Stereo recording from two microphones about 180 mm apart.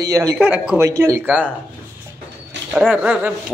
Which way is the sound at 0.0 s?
20° right (ahead or behind).